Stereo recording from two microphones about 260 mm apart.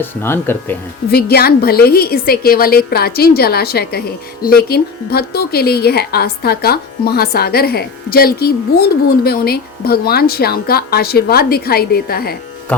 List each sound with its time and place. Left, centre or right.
0.0 s speech: centre
1.1 s a woman's voice: left